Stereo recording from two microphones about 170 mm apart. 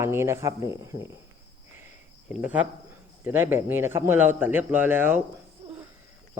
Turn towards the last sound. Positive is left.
turn(degrees=-10)  # may be behind; listen again after turning